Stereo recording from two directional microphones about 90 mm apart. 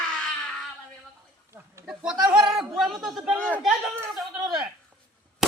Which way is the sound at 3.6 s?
5° right (ahead or behind).